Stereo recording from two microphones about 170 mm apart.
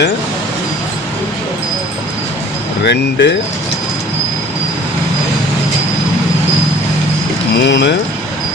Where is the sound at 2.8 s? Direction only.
90° left.